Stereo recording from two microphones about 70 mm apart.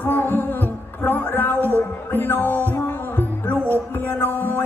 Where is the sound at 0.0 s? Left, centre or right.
Left.